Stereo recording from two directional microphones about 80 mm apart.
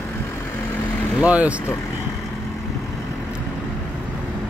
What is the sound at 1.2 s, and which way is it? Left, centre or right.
Speech, centre.